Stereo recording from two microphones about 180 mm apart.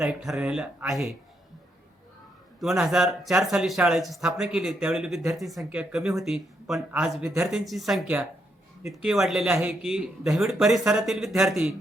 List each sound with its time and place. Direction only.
0.0 s speech: centre (ahead or behind)
2.6 s speech: centre (ahead or behind)